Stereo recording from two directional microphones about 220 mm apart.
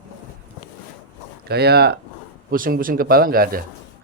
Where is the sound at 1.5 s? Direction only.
45° right (ahead or behind).